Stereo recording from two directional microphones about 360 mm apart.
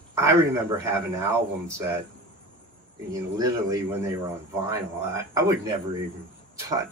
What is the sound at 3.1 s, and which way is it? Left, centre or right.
A man's voice, centre.